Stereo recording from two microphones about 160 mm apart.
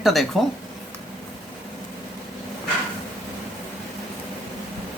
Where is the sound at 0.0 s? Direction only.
Centre (ahead or behind).